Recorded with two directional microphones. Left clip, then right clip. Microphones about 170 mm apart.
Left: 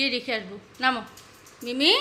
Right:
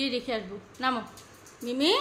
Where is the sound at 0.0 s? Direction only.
Centre (ahead or behind).